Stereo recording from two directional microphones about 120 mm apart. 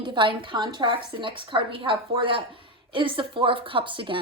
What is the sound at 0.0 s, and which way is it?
A woman's voice, 40° right (ahead or behind).